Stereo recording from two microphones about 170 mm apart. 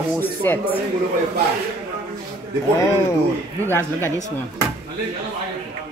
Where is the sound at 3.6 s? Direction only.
10° left (ahead or behind).